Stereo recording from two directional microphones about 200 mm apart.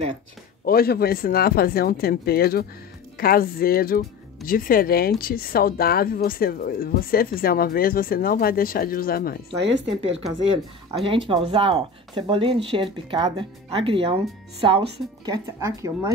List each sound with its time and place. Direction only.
0.7 s a woman's voice: 50° left (ahead or behind)
9.6 s speech: 60° right (ahead or behind)
11.1 s speech: 25° right (ahead or behind)